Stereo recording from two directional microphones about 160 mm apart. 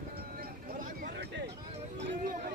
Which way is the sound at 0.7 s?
75° right (ahead or behind).